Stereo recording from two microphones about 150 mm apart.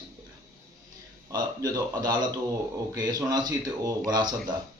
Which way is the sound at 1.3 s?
25° right (ahead or behind).